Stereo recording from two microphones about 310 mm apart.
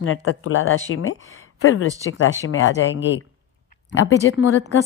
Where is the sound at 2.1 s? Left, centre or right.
Left.